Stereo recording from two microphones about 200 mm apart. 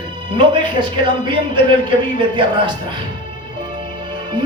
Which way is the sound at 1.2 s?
25° right (ahead or behind).